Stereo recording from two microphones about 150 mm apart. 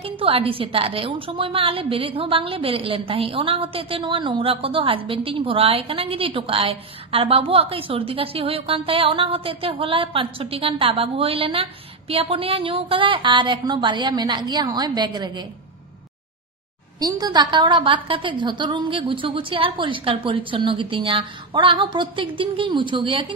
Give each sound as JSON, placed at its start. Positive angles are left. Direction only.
{"t": 0.0, "sound": "a woman's voice", "side_deg": -40}
{"t": 17.0, "sound": "a woman's voice", "side_deg": -25}